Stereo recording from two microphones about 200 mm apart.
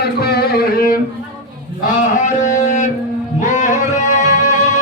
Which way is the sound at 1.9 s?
35° left (ahead or behind).